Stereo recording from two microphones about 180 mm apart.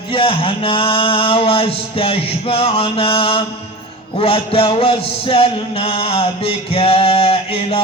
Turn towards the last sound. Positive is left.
turn(degrees=30)  # may be behind; listen again after turning